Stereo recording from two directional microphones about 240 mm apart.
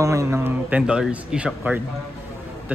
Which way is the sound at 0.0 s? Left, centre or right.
Centre.